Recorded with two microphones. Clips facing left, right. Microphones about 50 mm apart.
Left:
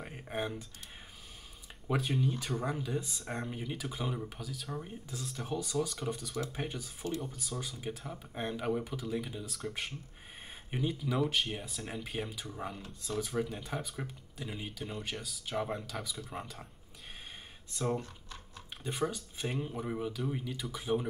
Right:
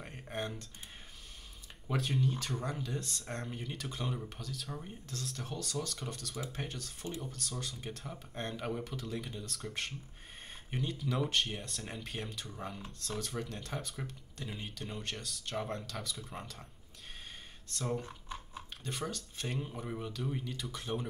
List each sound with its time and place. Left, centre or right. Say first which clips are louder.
0.0 s speech: left 3 dB; centre
1.9 s speech: left 2 dB; centre
17.6 s speech: left 3 dB; centre
18.0 s a sound: right 4 dB; centre
18.9 s speech: left 5 dB; centre